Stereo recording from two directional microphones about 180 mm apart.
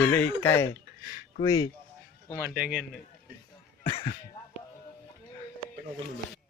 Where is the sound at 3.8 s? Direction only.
30° left (ahead or behind).